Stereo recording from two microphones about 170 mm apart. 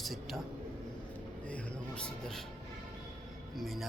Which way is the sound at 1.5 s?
5° left (ahead or behind).